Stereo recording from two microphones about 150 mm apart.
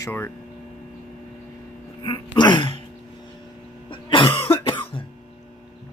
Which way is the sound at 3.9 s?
35° left (ahead or behind).